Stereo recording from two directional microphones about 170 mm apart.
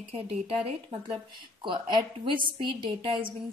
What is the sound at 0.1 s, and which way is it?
A woman's voice, 35° right (ahead or behind).